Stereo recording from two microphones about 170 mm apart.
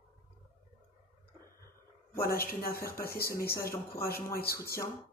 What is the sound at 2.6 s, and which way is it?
Speech, 65° left (ahead or behind).